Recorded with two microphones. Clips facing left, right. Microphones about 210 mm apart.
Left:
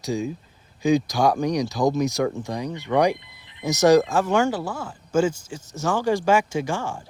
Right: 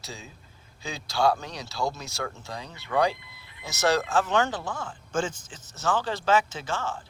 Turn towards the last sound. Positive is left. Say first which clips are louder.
# left 6 dB
turn(degrees=15)  # may be behind; listen again after turning